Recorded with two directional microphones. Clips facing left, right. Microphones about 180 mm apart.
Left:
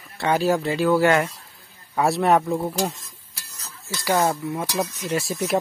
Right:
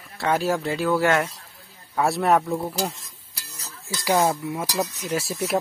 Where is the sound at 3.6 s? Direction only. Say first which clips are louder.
Even; 15° right (ahead or behind).